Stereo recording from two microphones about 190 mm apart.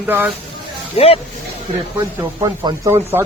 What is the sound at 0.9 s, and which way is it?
Speech, 30° left (ahead or behind).